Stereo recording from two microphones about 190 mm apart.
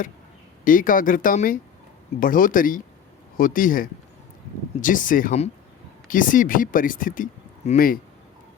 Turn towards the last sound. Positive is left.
turn(degrees=45)  # may be behind; listen again after turning